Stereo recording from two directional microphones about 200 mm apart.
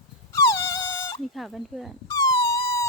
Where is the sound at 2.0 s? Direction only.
15° left (ahead or behind).